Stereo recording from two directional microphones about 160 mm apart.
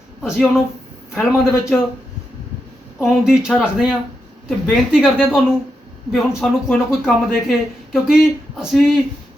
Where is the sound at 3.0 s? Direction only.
Centre (ahead or behind).